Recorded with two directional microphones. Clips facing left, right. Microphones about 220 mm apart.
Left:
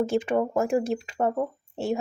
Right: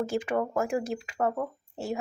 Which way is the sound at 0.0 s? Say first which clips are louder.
Left 4 dB; 25° left (ahead or behind).